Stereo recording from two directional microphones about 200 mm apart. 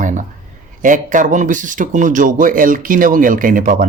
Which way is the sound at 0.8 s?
40° right (ahead or behind).